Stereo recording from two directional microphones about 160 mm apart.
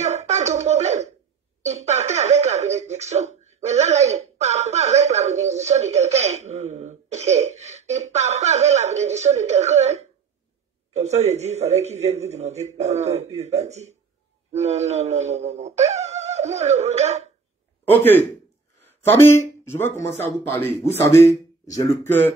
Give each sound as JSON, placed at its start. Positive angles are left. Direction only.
{"t": 0.0, "sound": "a sound", "side_deg": -45}
{"t": 12.7, "sound": "speech", "side_deg": -45}
{"t": 14.5, "sound": "wail", "side_deg": -45}
{"t": 17.8, "sound": "a man's voice", "side_deg": 10}